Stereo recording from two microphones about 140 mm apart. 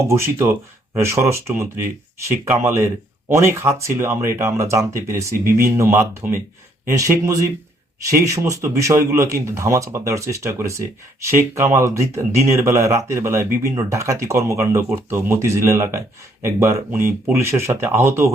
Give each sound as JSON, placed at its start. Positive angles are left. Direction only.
{"t": 0.0, "sound": "speech", "side_deg": -20}